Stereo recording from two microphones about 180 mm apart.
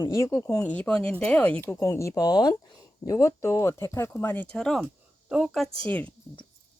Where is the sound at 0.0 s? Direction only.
15° left (ahead or behind).